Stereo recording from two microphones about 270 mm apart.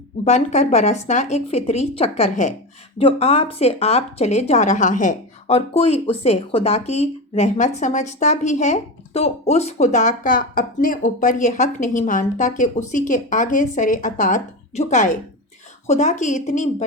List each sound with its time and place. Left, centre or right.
0.3 s speech: left